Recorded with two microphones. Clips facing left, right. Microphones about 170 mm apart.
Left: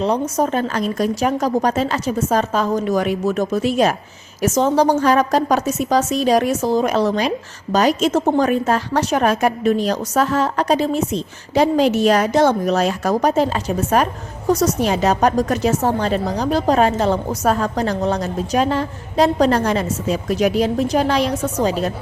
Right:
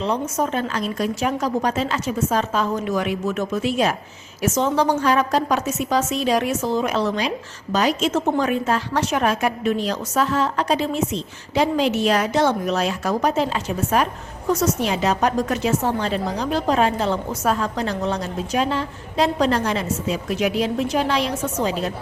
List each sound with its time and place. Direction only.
0.0 s a woman's voice: 40° left (ahead or behind)